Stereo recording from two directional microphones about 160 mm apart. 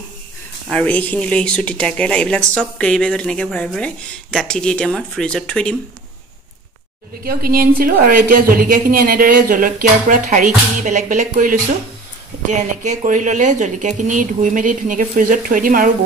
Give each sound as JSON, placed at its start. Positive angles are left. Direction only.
{"t": 0.7, "sound": "speech", "side_deg": 10}
{"t": 7.2, "sound": "a woman's voice", "side_deg": -70}